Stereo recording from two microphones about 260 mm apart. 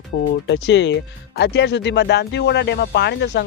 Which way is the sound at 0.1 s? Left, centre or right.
Left.